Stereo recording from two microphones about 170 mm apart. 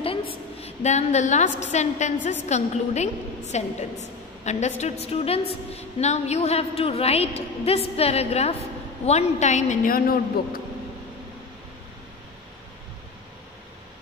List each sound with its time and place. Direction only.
0.3 s a woman's voice: 35° left (ahead or behind); by 10.6 s 60° left (ahead or behind)